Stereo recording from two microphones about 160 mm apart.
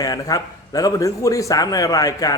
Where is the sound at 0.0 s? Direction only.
20° left (ahead or behind).